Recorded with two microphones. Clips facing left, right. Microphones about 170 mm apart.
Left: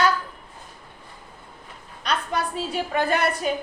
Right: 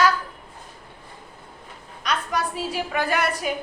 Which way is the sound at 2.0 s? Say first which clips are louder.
Even; 25° left (ahead or behind).